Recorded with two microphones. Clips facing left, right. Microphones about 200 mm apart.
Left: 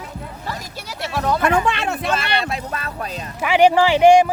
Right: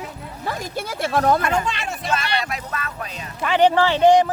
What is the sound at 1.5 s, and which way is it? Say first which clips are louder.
Speech: left 4 dB; 60° left (ahead or behind).